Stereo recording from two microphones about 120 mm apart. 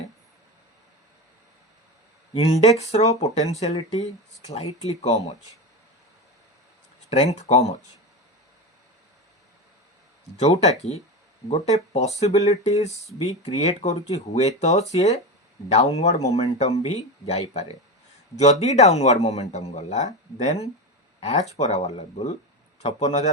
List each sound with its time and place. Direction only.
2.3 s a man's voice: 60° left (ahead or behind)
7.1 s speech: 65° left (ahead or behind)
10.3 s a man's voice: 65° left (ahead or behind)